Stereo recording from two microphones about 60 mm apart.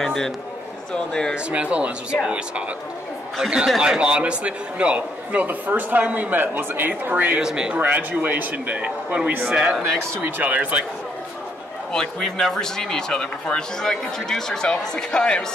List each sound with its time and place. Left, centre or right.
0.0 s a man's voice: centre
1.3 s a man's voice: right
7.3 s speech: centre
7.7 s a man's voice: right
11.9 s speech: centre